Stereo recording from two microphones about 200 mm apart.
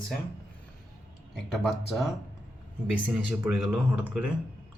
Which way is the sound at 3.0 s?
10° right (ahead or behind).